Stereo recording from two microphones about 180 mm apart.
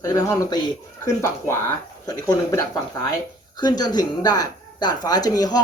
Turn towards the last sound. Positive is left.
turn(degrees=20)  # may be behind; listen again after turning